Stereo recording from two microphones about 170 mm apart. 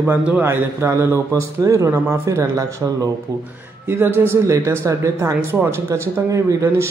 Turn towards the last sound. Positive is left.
turn(degrees=-15)  # may be behind; listen again after turning